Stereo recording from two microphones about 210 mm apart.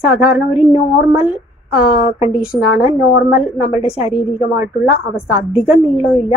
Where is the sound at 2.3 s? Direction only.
5° right (ahead or behind).